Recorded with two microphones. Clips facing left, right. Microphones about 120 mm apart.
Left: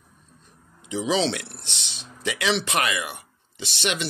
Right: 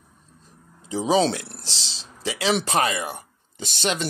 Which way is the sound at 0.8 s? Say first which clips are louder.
Right 3 dB; 40° right (ahead or behind).